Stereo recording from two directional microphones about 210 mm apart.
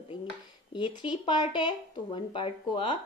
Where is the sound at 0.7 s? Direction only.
25° left (ahead or behind).